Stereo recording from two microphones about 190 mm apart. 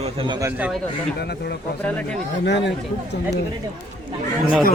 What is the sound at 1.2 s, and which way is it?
A man's voice, 60° left (ahead or behind).